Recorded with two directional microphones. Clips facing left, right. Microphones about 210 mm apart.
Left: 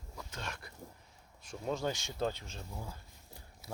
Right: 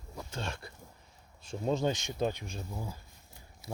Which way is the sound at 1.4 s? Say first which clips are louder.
Right 5 dB; 25° right (ahead or behind).